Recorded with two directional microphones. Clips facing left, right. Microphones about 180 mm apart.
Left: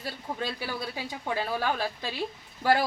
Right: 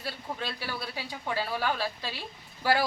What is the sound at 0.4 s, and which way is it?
A woman's voice, 15° left (ahead or behind).